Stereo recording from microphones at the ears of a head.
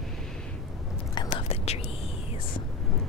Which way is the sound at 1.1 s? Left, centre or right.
Left.